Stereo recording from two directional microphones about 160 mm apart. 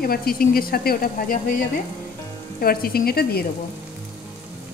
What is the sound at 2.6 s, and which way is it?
Speech, 70° left (ahead or behind).